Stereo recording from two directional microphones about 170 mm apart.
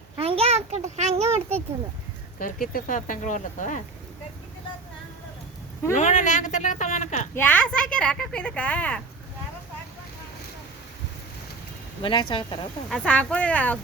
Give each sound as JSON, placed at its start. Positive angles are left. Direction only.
{"t": 0.2, "sound": "a child's voice", "side_deg": -35}
{"t": 2.4, "sound": "speech", "side_deg": 55}
{"t": 5.9, "sound": "speech", "side_deg": 45}
{"t": 7.3, "sound": "speech", "side_deg": 10}
{"t": 12.0, "sound": "speech", "side_deg": 30}
{"t": 12.9, "sound": "speech", "side_deg": 5}